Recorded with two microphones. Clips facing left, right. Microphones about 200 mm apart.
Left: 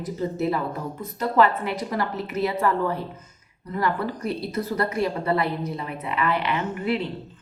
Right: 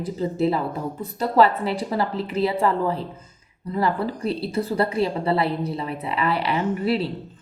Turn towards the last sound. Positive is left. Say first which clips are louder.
# right 3 dB
turn(degrees=-35)  # may be behind; listen again after turning